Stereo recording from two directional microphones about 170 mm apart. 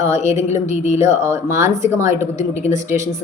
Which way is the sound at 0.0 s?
20° right (ahead or behind).